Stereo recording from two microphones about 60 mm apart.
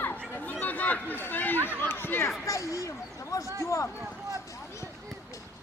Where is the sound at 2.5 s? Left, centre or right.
Left.